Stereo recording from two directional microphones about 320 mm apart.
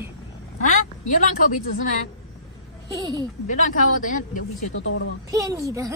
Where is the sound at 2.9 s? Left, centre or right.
Centre.